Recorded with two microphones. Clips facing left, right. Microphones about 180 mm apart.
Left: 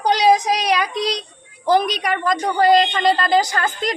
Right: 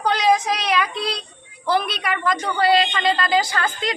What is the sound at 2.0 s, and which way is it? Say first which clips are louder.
A woman's voice: left 3 dB; 40° left (ahead or behind).